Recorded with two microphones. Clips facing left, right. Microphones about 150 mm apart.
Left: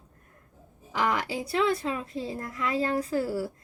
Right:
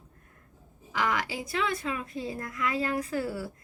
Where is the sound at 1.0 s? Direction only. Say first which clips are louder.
Left 2 dB; 30° left (ahead or behind).